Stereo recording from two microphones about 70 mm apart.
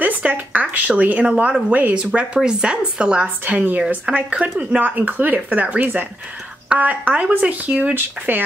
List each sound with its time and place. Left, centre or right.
0.0 s speech: right
2.1 s a woman's voice: centre